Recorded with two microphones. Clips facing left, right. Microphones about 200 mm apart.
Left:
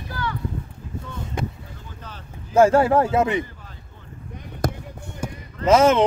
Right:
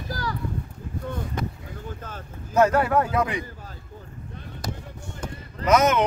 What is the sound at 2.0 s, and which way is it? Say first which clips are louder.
Boat: right 2 dB; 50° right (ahead or behind).